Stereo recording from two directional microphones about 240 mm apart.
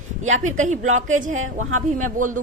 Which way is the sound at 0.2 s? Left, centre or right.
Right.